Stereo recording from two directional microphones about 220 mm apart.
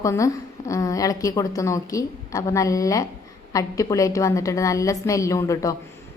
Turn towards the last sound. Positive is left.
turn(degrees=15)  # may be behind; listen again after turning